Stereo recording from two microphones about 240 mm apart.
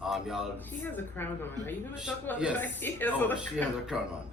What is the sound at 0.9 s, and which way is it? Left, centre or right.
Speech, centre.